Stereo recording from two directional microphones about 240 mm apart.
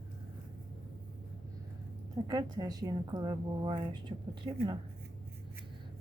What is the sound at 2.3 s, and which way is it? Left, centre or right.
A woman's voice, centre.